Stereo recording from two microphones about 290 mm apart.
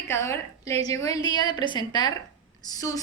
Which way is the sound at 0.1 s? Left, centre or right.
Centre.